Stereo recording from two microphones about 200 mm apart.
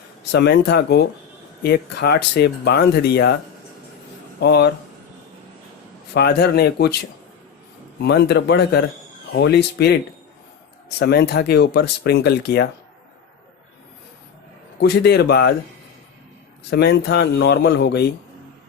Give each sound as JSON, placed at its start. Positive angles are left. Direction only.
{"t": 0.3, "sound": "speech", "side_deg": 55}
{"t": 4.4, "sound": "speech", "side_deg": 55}
{"t": 6.1, "sound": "speech", "side_deg": 55}
{"t": 8.0, "sound": "speech", "side_deg": 55}
{"t": 14.8, "sound": "speech", "side_deg": 55}
{"t": 16.6, "sound": "speech", "side_deg": 55}